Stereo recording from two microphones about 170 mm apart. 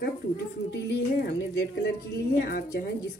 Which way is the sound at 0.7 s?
85° left.